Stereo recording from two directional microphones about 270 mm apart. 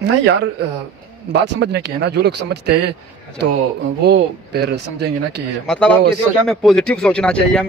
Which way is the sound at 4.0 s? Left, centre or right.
Right.